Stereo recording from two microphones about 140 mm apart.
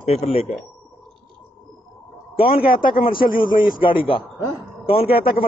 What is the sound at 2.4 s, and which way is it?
Speech, 90° left.